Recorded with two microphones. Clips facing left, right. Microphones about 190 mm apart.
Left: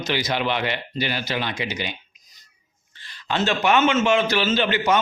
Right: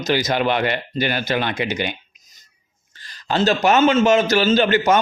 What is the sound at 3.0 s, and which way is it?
A man's voice, 40° right (ahead or behind).